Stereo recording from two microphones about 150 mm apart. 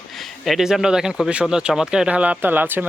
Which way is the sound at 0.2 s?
Centre (ahead or behind).